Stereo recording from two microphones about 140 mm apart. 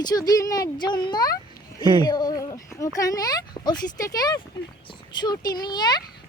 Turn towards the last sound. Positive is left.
turn(degrees=30)  # may be behind; listen again after turning